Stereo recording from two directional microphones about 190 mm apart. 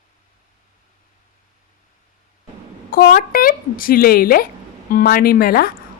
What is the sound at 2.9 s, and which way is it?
A woman's voice, 50° left (ahead or behind).